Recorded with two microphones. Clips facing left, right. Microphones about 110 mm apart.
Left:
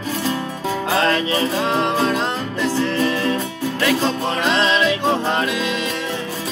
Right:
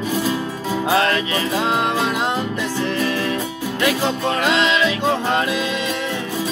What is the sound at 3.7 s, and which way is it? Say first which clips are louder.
Music: even; 15° right (ahead or behind).